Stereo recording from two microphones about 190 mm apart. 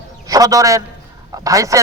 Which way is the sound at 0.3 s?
20° right (ahead or behind).